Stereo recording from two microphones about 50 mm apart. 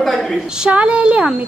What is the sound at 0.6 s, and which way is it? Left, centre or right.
Speech, right.